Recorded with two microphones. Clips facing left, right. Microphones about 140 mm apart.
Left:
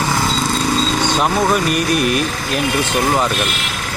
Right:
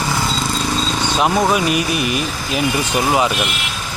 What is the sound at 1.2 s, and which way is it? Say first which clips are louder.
Speech: right 2 dB; 5° right (ahead or behind).